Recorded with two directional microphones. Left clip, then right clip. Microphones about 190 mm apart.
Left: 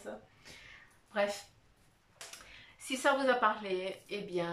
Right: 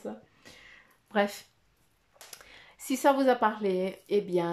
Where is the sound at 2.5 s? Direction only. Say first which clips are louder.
Right 6 dB; 40° right (ahead or behind).